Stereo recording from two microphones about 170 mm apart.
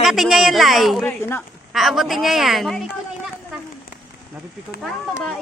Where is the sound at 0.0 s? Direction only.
Centre (ahead or behind).